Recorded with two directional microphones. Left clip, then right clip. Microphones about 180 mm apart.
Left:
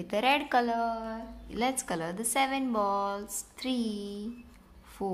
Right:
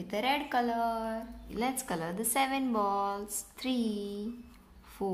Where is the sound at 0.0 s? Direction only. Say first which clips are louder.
Left 4 dB; 20° left (ahead or behind).